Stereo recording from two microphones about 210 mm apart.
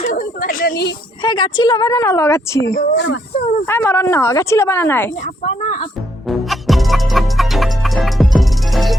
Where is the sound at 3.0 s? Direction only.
55° left (ahead or behind).